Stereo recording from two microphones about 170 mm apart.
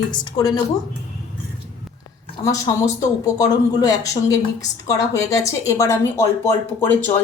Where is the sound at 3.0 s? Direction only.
20° left (ahead or behind).